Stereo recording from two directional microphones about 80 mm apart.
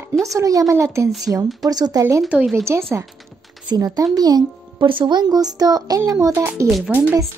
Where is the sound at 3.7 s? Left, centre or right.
Right.